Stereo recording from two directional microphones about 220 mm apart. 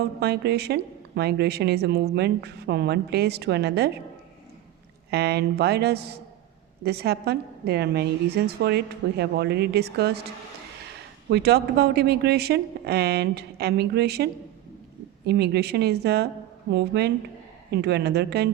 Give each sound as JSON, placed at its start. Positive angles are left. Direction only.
{"t": 0.0, "sound": "a woman's voice", "side_deg": -45}
{"t": 5.1, "sound": "a woman's voice", "side_deg": -45}
{"t": 11.3, "sound": "a woman's voice", "side_deg": -50}
{"t": 15.3, "sound": "a woman's voice", "side_deg": -45}